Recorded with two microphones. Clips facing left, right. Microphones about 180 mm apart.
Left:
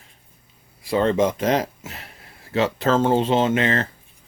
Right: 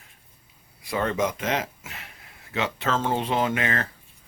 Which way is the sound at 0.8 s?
30° left (ahead or behind).